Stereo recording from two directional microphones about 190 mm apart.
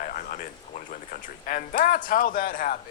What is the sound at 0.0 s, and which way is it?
Speech, 45° left (ahead or behind).